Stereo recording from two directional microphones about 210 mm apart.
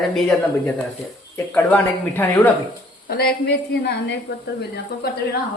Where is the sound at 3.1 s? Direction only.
50° left (ahead or behind).